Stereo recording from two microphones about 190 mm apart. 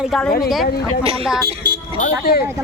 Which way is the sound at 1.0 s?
30° right (ahead or behind).